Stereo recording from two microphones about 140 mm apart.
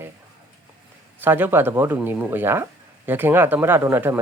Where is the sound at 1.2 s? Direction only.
15° right (ahead or behind).